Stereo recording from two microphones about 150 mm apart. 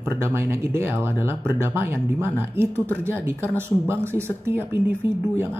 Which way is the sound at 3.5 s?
15° right (ahead or behind).